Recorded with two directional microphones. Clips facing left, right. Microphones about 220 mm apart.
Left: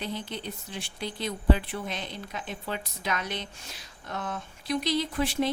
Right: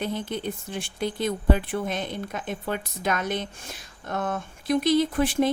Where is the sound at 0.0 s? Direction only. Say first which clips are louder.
Right 6 dB; 50° right (ahead or behind).